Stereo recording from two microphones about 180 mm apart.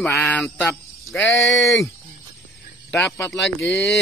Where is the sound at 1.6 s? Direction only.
Centre (ahead or behind).